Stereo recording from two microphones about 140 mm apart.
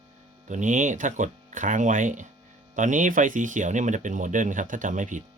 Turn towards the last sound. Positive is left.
turn(degrees=-65)  # may be behind; listen again after turning